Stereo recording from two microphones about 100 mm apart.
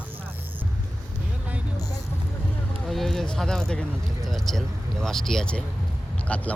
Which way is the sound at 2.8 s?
5° left (ahead or behind).